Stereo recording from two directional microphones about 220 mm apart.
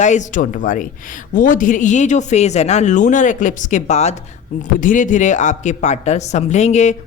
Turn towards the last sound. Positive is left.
turn(degrees=30)  # may be behind; listen again after turning